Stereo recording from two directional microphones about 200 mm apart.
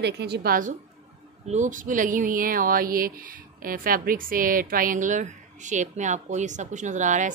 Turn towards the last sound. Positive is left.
turn(degrees=-40)  # may be behind; listen again after turning